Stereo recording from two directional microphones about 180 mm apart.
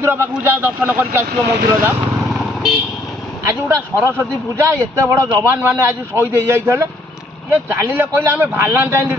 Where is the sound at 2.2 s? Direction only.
Centre (ahead or behind).